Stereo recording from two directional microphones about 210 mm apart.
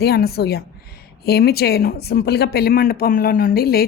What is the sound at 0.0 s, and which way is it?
A woman's voice, 50° left (ahead or behind).